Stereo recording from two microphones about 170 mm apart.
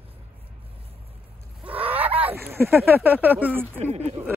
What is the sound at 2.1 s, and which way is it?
Speech, 10° right (ahead or behind).